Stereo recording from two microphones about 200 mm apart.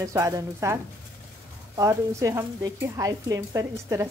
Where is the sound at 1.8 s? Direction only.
15° right (ahead or behind).